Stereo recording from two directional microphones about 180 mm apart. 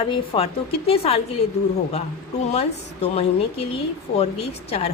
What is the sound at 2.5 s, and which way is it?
Speech, 35° left (ahead or behind).